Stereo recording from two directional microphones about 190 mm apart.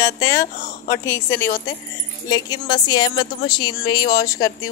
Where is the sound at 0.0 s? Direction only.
15° left (ahead or behind).